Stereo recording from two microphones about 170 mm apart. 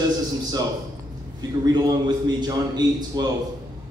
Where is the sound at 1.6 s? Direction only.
20° right (ahead or behind).